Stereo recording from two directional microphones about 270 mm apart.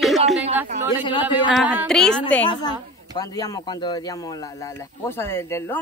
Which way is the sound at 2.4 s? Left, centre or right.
Centre.